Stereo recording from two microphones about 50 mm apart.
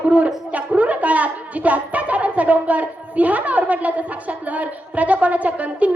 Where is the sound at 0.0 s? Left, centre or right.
Right.